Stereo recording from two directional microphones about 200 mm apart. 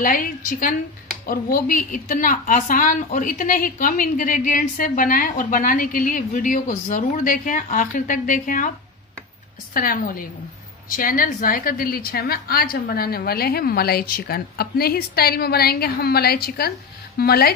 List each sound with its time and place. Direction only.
0.0 s a woman's voice: 45° left (ahead or behind)
9.8 s a woman's voice: 45° left (ahead or behind)